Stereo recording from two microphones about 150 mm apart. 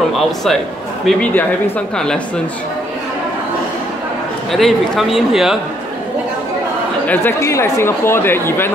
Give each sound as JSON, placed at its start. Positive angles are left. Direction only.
{"t": 0.1, "sound": "a man's voice", "side_deg": 0}
{"t": 4.5, "sound": "a man's voice", "side_deg": 0}
{"t": 7.1, "sound": "speech", "side_deg": 15}